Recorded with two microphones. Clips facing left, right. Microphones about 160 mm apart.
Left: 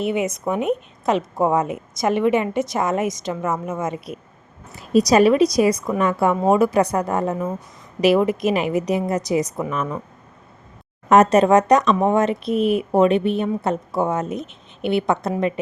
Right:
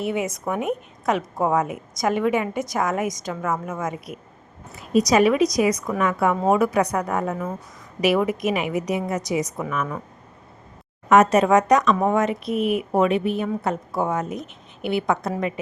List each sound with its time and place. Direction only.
0.0 s a woman's voice: 20° left (ahead or behind)
11.1 s a woman's voice: 30° left (ahead or behind)